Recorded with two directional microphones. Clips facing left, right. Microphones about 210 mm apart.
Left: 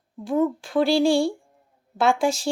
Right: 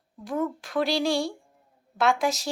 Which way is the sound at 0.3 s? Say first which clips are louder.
Left 6 dB; 30° left (ahead or behind).